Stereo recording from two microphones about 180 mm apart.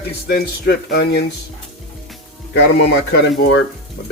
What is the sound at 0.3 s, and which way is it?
Speech, 60° left (ahead or behind).